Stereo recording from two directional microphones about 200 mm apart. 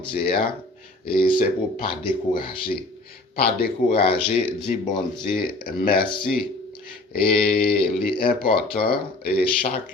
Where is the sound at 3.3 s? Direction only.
50° left (ahead or behind).